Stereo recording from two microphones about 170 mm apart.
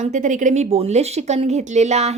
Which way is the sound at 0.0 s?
45° right (ahead or behind).